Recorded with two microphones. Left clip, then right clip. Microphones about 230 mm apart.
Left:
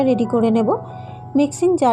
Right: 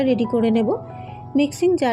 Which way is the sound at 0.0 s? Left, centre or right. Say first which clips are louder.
Left 2 dB; centre.